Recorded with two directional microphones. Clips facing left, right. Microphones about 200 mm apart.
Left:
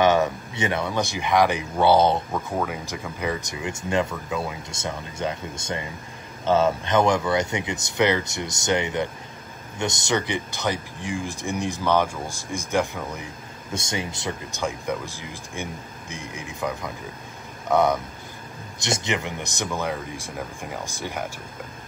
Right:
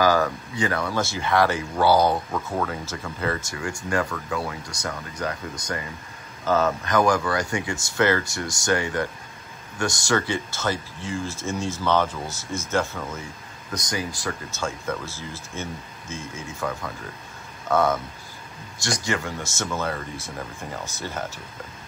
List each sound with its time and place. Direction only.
0.0 s speech: 20° left (ahead or behind)
2.5 s speech: 10° left (ahead or behind)